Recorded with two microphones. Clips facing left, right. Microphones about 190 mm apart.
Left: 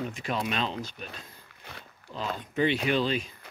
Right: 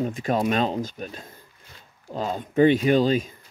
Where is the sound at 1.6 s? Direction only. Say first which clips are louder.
Left 9 dB; 70° left (ahead or behind).